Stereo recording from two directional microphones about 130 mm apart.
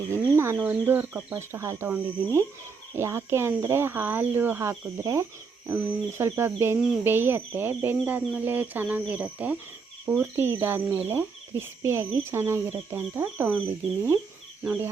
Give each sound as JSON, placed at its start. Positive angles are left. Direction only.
{"t": 0.1, "sound": "cricket", "side_deg": -20}
{"t": 0.6, "sound": "speech", "side_deg": -15}